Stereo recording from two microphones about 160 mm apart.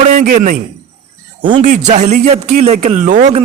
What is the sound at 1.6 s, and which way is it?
Speech, 50° right (ahead or behind).